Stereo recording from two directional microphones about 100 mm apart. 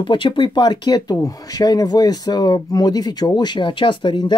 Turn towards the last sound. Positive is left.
turn(degrees=50)  # may be behind; listen again after turning